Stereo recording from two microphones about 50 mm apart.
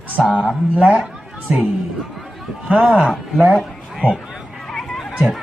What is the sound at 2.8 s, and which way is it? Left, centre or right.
Speech, centre.